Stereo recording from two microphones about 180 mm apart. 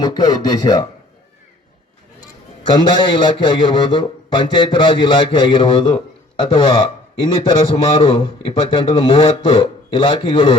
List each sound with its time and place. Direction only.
0.0 s a man's voice: 25° left (ahead or behind)
2.9 s a man's voice: 25° left (ahead or behind)